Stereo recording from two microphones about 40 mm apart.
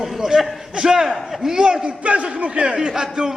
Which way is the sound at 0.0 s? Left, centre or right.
Centre.